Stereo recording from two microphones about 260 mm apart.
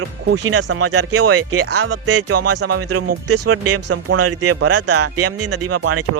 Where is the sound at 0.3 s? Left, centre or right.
Right.